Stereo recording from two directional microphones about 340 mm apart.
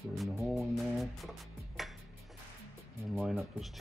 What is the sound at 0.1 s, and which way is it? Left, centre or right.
Music, centre.